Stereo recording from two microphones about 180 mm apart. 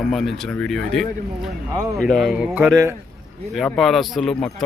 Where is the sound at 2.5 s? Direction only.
10° right (ahead or behind).